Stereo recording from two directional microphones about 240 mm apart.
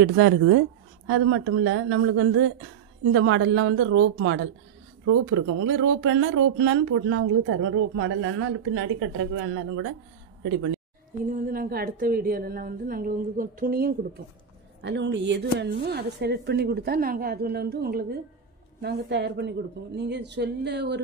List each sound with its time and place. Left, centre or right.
0.0 s a woman's voice: right
11.2 s a woman's voice: right